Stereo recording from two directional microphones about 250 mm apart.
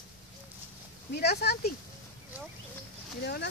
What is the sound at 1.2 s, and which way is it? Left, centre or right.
Speech, left.